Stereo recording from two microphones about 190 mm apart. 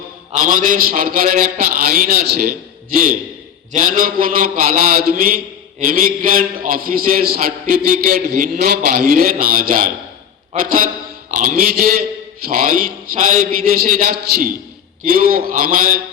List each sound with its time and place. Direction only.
0.4 s a man's voice: 45° right (ahead or behind)
3.7 s a man's voice: 45° right (ahead or behind)
5.8 s a man's voice: 50° right (ahead or behind)